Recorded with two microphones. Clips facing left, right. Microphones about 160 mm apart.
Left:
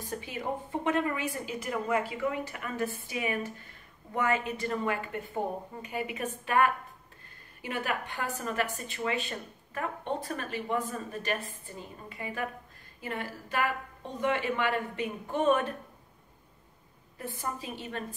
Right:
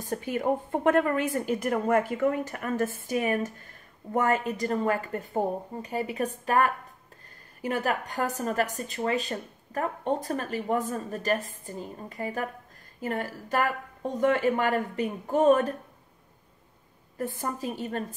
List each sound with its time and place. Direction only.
0.0 s a woman's voice: 45° right (ahead or behind)
17.2 s a woman's voice: 45° right (ahead or behind)